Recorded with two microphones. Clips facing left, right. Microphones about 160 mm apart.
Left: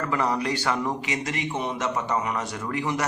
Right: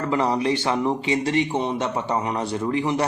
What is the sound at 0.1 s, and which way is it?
A man's voice, 25° right (ahead or behind).